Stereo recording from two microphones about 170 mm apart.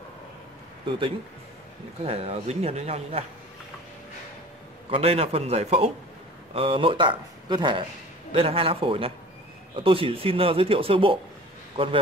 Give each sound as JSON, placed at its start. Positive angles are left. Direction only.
{"t": 2.0, "sound": "a man's voice", "side_deg": -35}
{"t": 4.9, "sound": "a man's voice", "side_deg": -35}